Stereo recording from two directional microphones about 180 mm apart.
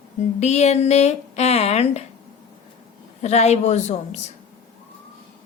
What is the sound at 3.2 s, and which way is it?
Speech, 40° left (ahead or behind).